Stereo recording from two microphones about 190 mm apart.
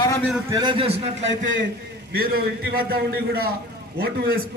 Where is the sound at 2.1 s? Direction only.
50° right (ahead or behind).